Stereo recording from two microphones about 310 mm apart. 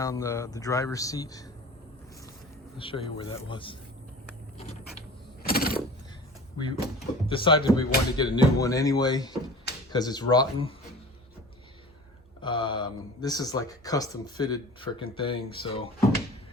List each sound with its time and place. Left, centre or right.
0.0 s speech: centre
2.7 s speech: centre
5.4 s a sound: left
7.3 s speech: centre
12.4 s speech: centre